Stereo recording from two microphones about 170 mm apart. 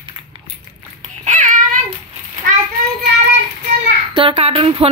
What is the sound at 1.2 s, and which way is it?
Babbling, 45° right (ahead or behind).